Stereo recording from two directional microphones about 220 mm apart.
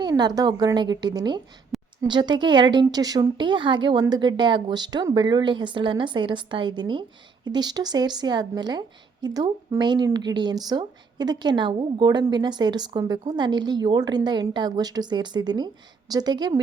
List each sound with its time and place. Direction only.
0.0 s a woman's voice: 20° right (ahead or behind)